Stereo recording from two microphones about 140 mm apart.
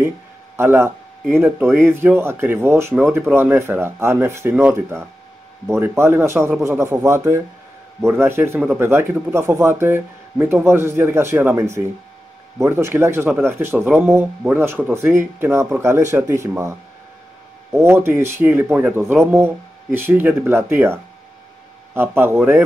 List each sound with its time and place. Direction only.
0.6 s speech: 20° right (ahead or behind)
17.7 s speech: 15° right (ahead or behind)